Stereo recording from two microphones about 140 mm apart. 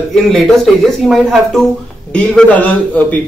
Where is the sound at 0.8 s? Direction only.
Centre (ahead or behind).